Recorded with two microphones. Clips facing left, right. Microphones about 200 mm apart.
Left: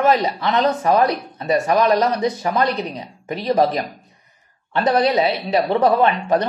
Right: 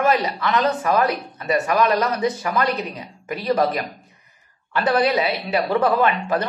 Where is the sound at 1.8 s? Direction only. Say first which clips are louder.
Left 2 dB; 25° left (ahead or behind).